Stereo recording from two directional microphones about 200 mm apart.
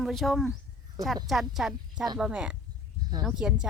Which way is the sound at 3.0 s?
20° right (ahead or behind).